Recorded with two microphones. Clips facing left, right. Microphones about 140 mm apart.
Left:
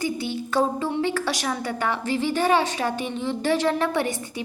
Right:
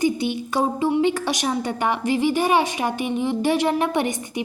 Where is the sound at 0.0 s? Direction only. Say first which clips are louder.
Right 5 dB; 20° right (ahead or behind).